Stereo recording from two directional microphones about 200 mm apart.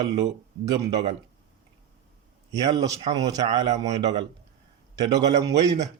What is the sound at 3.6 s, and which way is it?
Speech, 35° right (ahead or behind).